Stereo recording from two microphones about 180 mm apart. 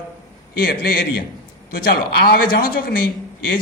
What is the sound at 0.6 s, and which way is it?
A man's voice, 55° left (ahead or behind).